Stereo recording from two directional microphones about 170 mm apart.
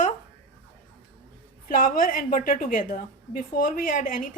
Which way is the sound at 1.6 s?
55° left (ahead or behind).